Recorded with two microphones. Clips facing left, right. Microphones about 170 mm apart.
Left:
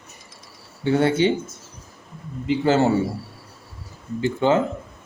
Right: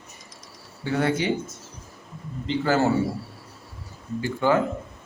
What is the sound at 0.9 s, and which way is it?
Speech, 25° left (ahead or behind).